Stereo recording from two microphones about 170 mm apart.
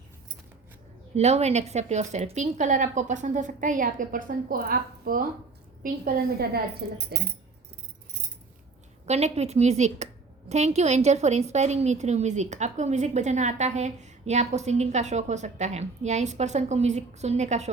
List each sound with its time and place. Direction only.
1.1 s a woman's voice: 40° right (ahead or behind); by 7.0 s 65° right (ahead or behind)
9.0 s a woman's voice: 40° right (ahead or behind)